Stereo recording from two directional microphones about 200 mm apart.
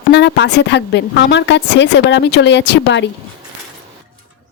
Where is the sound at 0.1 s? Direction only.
60° left (ahead or behind).